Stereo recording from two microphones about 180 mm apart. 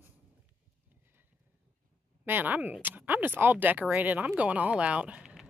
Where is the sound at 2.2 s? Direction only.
10° right (ahead or behind).